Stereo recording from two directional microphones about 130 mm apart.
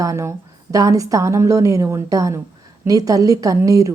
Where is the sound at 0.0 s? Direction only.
25° right (ahead or behind).